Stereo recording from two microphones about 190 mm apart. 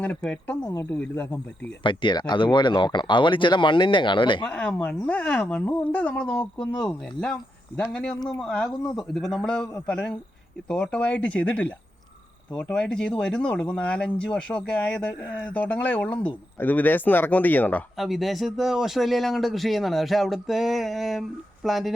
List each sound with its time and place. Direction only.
0.0 s speech: 5° left (ahead or behind)
1.8 s speech: 25° left (ahead or behind)
4.4 s speech: 5° left (ahead or behind)